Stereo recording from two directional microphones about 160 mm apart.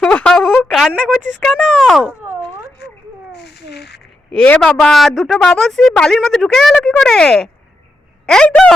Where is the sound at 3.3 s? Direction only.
90° left.